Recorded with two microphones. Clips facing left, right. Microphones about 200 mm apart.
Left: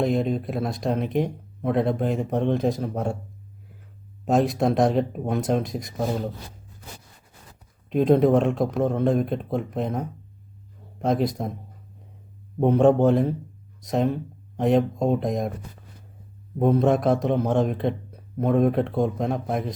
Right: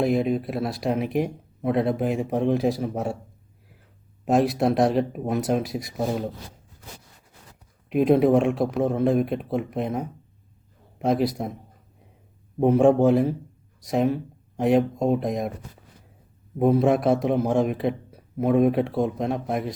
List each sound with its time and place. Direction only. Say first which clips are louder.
0.0 s a man's voice: right 1 dB; 5° right (ahead or behind)
4.3 s a man's voice: even; 5° right (ahead or behind)
7.9 s a man's voice: even; 5° right (ahead or behind)
12.5 s a man's voice: even; 5° right (ahead or behind)
16.6 s a man's voice: right 1 dB; 5° right (ahead or behind)